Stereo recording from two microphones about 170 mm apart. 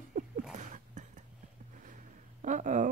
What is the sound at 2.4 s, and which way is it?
Speech, 50° right (ahead or behind).